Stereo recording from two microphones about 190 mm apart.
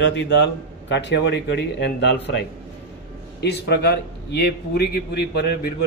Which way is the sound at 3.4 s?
60° left (ahead or behind).